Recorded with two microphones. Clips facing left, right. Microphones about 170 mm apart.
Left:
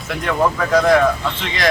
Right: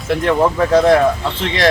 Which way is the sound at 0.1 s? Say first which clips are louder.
Right 4 dB; 30° right (ahead or behind).